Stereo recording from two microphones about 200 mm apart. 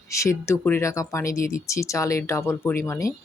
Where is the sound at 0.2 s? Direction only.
15° left (ahead or behind).